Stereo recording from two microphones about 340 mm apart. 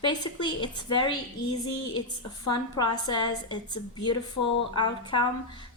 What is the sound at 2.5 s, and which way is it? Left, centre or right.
A woman's voice, centre.